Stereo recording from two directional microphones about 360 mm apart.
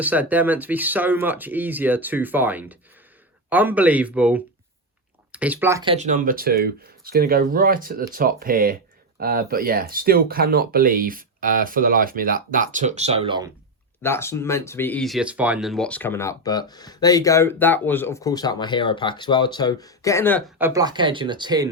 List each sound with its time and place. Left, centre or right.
0.0 s speech: centre
14.0 s speech: centre
20.6 s speech: centre